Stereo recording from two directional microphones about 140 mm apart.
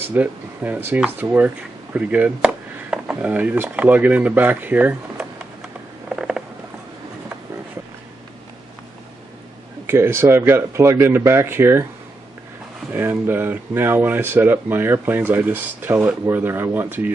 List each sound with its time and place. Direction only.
0.0 s speech: 15° right (ahead or behind)
6.0 s a sound: 5° right (ahead or behind)
9.8 s speech: 15° right (ahead or behind)
12.9 s speech: 15° right (ahead or behind)